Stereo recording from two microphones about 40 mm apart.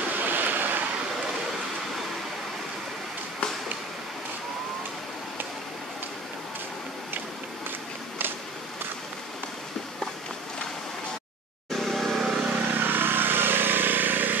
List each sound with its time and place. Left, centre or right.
0.2 s waves: right
11.7 s vehicle: centre
12.2 s vehicle: centre
12.7 s vehicle: right